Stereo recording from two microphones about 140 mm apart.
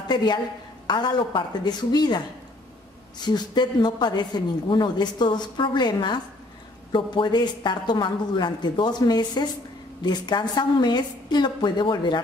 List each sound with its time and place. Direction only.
0.1 s speech: 30° left (ahead or behind)